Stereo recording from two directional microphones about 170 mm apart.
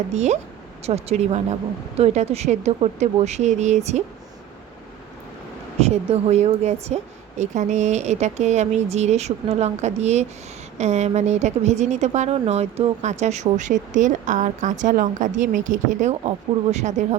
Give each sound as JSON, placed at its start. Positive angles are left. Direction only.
{"t": 0.1, "sound": "a woman's voice", "side_deg": -40}
{"t": 5.8, "sound": "a woman's voice", "side_deg": -40}